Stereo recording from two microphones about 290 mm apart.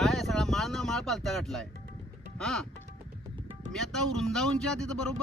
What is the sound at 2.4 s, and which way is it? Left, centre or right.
Speech, centre.